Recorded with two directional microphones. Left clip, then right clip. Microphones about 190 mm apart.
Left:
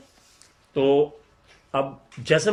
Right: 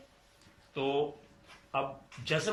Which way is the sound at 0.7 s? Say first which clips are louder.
Left 12 dB; 45° left (ahead or behind).